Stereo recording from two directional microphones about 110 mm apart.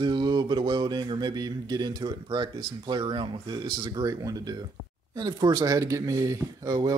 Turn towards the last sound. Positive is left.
turn(degrees=-35)  # may be behind; listen again after turning